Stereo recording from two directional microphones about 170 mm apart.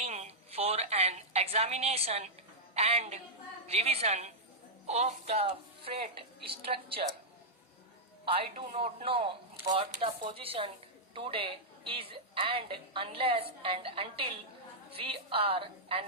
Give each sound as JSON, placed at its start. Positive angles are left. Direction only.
{"t": 0.0, "sound": "a sound", "side_deg": -40}
{"t": 2.7, "sound": "a woman's voice", "side_deg": -40}
{"t": 8.3, "sound": "a woman's voice", "side_deg": -35}